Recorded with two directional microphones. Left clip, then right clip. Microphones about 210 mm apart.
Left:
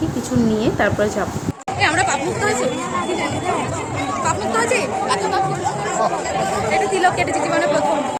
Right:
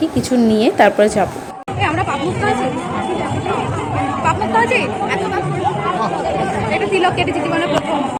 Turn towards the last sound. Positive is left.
turn(degrees=0)  # may be behind; listen again after turning